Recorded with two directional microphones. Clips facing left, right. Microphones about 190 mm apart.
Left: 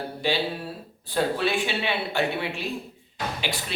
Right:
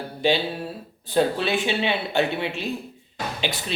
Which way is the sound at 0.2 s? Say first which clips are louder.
Right 4 dB; 20° right (ahead or behind).